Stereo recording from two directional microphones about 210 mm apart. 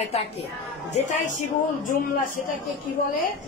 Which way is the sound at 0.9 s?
35° left (ahead or behind).